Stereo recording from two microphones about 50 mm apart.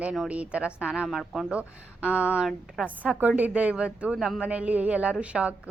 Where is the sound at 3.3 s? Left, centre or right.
Right.